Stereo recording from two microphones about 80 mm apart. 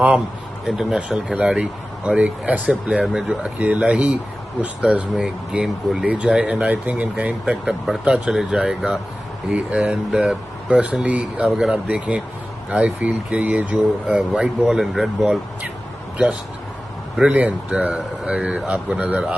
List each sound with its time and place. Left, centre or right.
0.7 s speech: centre
7.6 s speech: centre
9.8 s speech: centre
10.7 s speech: centre
17.2 s speech: centre